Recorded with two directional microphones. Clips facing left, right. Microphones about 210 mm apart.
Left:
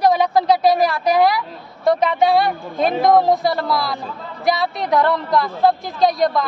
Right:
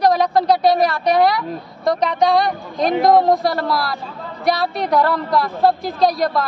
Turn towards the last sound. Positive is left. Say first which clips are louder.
# even
turn(degrees=0)  # may be behind; listen again after turning